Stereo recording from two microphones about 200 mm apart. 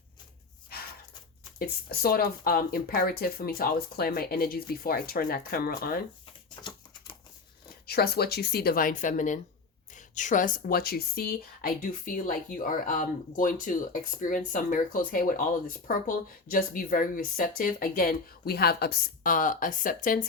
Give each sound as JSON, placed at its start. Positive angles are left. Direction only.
{"t": 1.5, "sound": "speech", "side_deg": 50}
{"t": 6.6, "sound": "typewriter", "side_deg": 20}
{"t": 7.9, "sound": "speech", "side_deg": 50}